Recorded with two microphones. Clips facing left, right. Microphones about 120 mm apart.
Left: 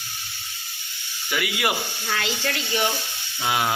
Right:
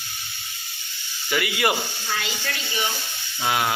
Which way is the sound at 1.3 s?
5° left (ahead or behind).